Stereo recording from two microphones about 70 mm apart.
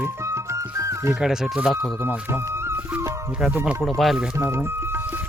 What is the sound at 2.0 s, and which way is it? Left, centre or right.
Speech, right.